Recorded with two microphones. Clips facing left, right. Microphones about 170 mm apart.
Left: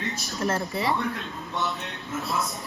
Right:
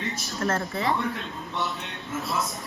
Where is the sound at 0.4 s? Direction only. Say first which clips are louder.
Even; 15° left (ahead or behind).